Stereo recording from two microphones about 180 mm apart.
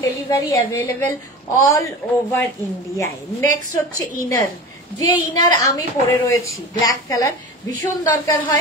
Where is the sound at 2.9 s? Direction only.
15° left (ahead or behind).